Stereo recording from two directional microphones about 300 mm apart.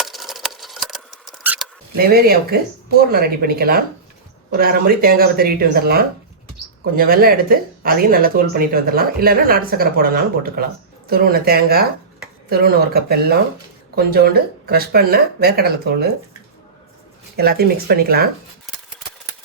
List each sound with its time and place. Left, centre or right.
0.0 s rodents: centre
2.0 s speech: right
17.3 s speech: right